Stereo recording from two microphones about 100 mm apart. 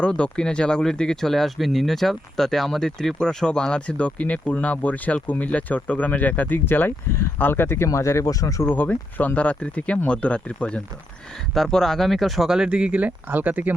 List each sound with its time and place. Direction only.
0.0 s speech: 10° left (ahead or behind); by 8.6 s 35° left (ahead or behind)
8.6 s speech: 20° left (ahead or behind); by 13.7 s 15° right (ahead or behind)